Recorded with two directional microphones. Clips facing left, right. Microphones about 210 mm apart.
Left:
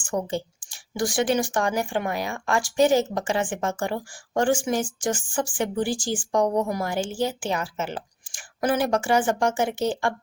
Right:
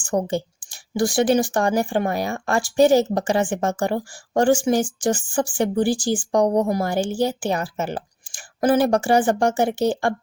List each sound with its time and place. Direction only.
0.0 s a woman's voice: 40° right (ahead or behind)